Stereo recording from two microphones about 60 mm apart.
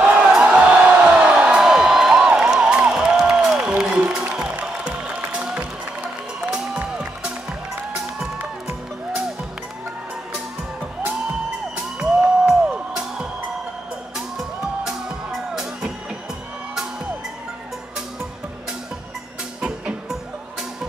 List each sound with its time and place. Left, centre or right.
0.0 s crowd: centre
2.9 s music: centre
11.7 s music: centre
14.9 s music: centre